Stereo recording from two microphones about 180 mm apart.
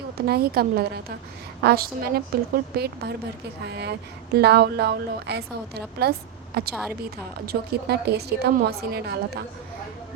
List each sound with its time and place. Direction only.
0.2 s a woman's voice: 60° right (ahead or behind)